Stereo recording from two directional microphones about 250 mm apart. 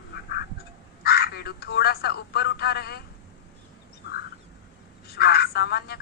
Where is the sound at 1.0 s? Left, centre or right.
Left.